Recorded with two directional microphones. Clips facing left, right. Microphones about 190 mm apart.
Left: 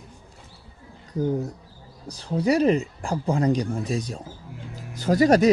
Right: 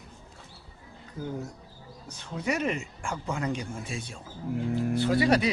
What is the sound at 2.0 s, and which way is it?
Speech, 35° left (ahead or behind).